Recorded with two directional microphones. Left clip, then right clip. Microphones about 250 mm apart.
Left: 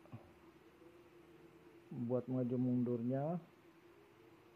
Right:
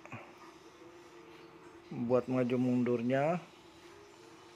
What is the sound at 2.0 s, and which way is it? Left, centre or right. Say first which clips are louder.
A man's voice: right 9 dB; right.